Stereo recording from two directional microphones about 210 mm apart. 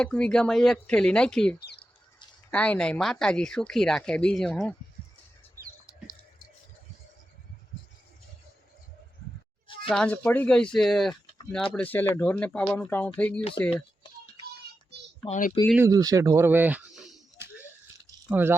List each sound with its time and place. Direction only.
0.0 s speech: 5° left (ahead or behind)
9.9 s speech: 5° left (ahead or behind)
15.3 s speech: 40° left (ahead or behind)
15.7 s speech: 15° right (ahead or behind)
17.3 s a sound: 10° right (ahead or behind)
18.3 s speech: 10° right (ahead or behind)